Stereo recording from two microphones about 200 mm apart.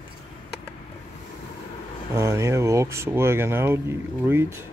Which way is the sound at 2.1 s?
15° right (ahead or behind).